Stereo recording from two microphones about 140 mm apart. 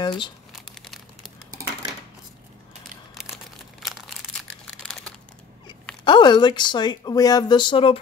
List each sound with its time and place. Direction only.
0.0 s speech: 35° left (ahead or behind)
0.5 s crumpling: centre (ahead or behind)
3.8 s a sound: centre (ahead or behind)
6.0 s speech: 35° left (ahead or behind)